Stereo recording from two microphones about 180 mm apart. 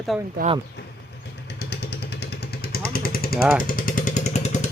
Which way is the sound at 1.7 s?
65° left (ahead or behind).